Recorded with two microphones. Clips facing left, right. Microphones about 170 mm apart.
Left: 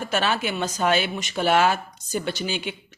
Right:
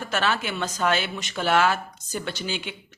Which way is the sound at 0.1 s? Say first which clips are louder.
Left 1 dB; 15° left (ahead or behind).